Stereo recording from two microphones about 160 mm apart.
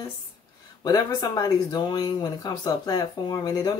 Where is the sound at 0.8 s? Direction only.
25° left (ahead or behind).